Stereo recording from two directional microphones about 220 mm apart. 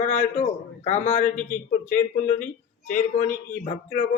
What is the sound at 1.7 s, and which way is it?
Speech, 40° left (ahead or behind).